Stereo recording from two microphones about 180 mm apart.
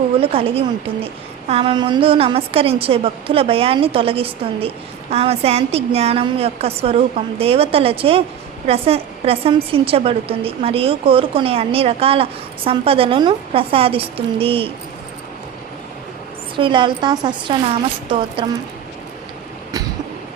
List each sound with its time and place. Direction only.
0.2 s a woman's voice: 30° right (ahead or behind)
16.6 s a woman's voice: 25° right (ahead or behind)